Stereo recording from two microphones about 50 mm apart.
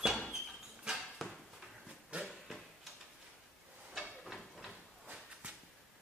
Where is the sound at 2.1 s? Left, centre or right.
Right.